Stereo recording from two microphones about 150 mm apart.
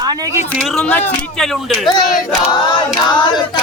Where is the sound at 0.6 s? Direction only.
5° left (ahead or behind).